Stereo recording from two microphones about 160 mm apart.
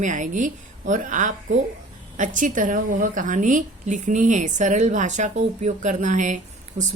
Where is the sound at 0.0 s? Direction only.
50° right (ahead or behind).